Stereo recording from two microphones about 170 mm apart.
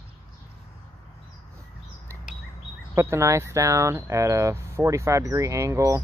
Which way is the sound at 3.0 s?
15° right (ahead or behind).